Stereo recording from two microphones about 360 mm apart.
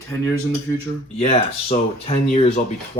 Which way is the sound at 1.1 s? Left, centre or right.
Centre.